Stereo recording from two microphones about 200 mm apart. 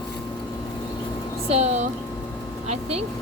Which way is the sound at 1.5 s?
35° right (ahead or behind).